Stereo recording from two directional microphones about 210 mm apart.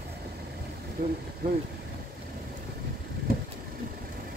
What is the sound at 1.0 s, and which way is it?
Speech, 45° right (ahead or behind).